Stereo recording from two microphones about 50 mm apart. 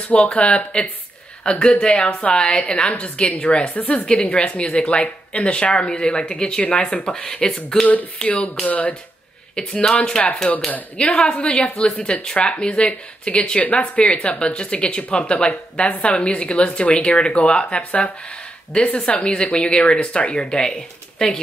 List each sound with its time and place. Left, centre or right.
0.3 s speech: left
3.7 s speech: left
4.0 s speech: centre
8.6 s speech: left
9.6 s speech: centre